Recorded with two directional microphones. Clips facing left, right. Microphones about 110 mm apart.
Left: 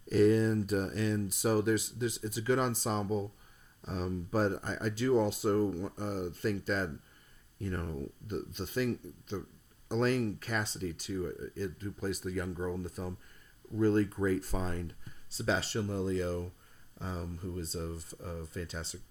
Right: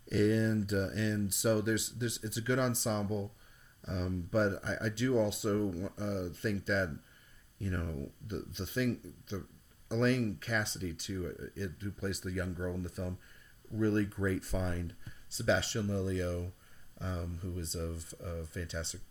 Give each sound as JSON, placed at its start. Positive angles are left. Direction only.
{"t": 0.1, "sound": "speech", "side_deg": 40}
{"t": 8.3, "sound": "speech", "side_deg": 40}
{"t": 17.6, "sound": "speech", "side_deg": 40}